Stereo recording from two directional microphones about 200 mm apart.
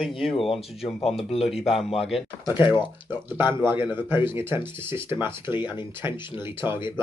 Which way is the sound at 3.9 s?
10° right (ahead or behind).